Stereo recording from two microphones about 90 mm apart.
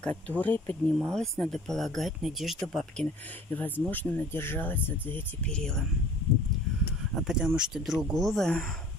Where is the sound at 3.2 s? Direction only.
20° left (ahead or behind).